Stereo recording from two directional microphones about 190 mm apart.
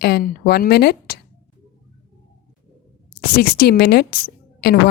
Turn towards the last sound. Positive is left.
turn(degrees=55)  # may be behind; listen again after turning